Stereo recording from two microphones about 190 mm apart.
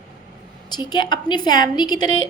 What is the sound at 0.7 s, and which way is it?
A woman's voice, 20° left (ahead or behind).